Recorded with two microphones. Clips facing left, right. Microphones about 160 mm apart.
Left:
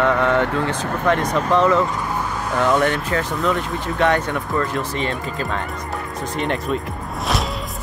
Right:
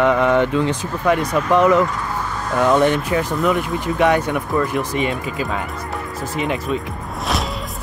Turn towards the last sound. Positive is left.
turn(degrees=-5)  # may be behind; listen again after turning